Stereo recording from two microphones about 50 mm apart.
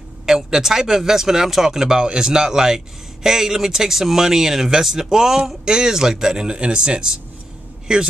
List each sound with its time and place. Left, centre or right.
0.3 s speech: centre